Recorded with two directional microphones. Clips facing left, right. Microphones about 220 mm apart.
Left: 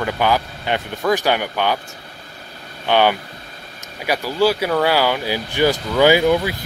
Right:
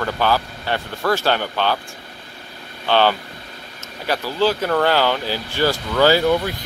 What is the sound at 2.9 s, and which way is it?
Speech, 15° left (ahead or behind).